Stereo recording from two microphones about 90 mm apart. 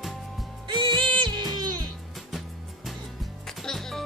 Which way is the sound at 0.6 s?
65° right (ahead or behind).